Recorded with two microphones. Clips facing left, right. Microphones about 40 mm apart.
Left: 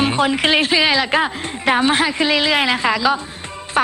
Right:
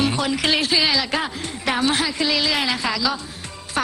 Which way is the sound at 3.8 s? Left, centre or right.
Left.